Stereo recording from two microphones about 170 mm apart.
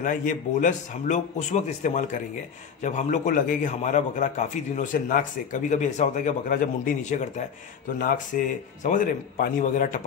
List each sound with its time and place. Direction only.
0.0 s a man's voice: 50° left (ahead or behind)